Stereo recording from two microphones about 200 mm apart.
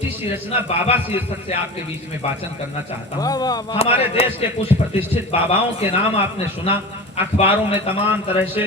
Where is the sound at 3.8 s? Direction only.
30° left (ahead or behind).